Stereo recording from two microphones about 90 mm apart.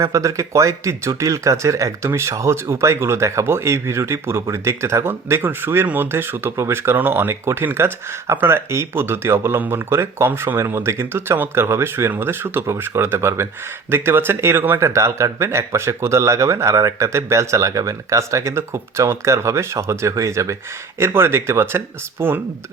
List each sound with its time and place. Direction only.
0.0 s speech: 35° right (ahead or behind)